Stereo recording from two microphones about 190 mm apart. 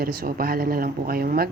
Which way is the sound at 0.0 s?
50° right (ahead or behind).